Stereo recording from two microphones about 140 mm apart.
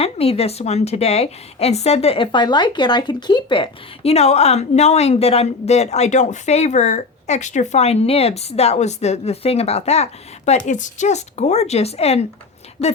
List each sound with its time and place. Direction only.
0.0 s a woman's voice: 45° left (ahead or behind)